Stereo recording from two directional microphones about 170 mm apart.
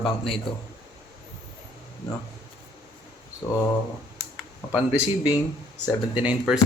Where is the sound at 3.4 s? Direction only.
15° left (ahead or behind).